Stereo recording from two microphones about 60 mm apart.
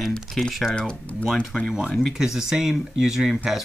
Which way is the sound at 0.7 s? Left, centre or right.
Centre.